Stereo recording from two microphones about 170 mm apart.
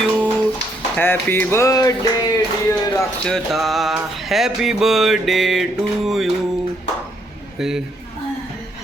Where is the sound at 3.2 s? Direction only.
Centre (ahead or behind).